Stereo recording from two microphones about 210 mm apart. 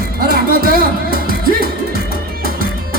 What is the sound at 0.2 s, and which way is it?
Music, 45° right (ahead or behind).